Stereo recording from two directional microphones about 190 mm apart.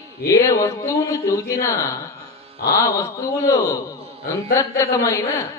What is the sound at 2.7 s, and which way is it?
A man's voice, 15° left (ahead or behind).